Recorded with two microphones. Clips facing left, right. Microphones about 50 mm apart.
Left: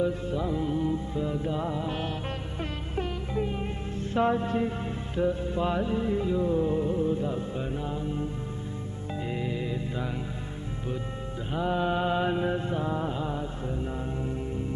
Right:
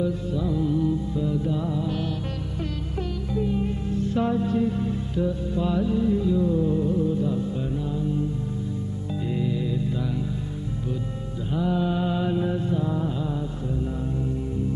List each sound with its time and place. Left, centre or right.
0.0 s music: left
11.5 s mantra: left